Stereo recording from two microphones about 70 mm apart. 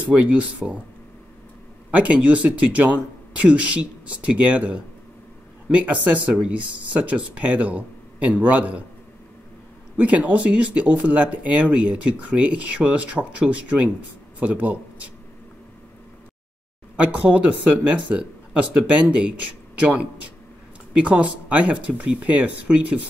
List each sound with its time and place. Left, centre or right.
0.1 s speech: right
1.9 s speech: right
9.9 s speech: right
16.9 s speech: right
20.9 s speech: centre